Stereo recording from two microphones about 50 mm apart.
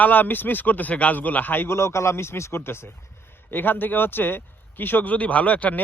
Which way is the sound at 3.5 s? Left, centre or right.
Left.